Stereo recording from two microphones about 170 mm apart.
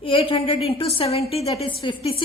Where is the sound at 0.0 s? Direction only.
30° left (ahead or behind).